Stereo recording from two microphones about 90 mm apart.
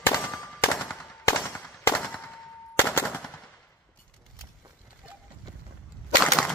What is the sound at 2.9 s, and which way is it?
Machine gun, 25° left (ahead or behind).